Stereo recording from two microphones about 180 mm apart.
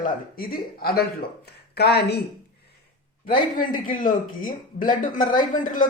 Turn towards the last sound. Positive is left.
turn(degrees=50)  # may be behind; listen again after turning